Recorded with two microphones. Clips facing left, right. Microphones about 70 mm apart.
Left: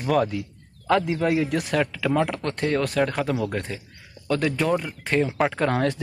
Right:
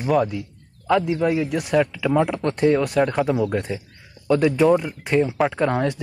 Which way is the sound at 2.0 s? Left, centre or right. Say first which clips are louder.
Right 3 dB; centre.